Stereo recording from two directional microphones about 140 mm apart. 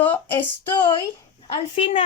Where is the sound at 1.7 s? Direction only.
40° left (ahead or behind).